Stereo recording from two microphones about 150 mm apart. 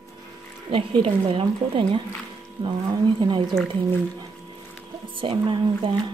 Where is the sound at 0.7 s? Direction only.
35° right (ahead or behind).